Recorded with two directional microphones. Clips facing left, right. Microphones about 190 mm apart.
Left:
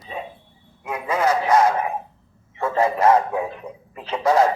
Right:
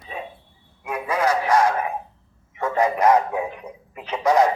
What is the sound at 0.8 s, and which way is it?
Speech, 25° left (ahead or behind).